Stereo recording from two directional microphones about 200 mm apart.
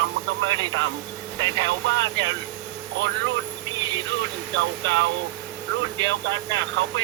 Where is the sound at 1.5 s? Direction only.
65° right (ahead or behind).